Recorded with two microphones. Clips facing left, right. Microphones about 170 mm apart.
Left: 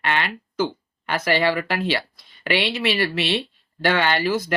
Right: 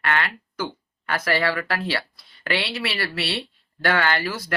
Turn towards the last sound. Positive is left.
turn(degrees=20)  # may be behind; listen again after turning